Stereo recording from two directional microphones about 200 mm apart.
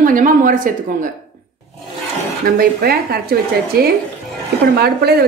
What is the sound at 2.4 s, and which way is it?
Speech, 50° right (ahead or behind).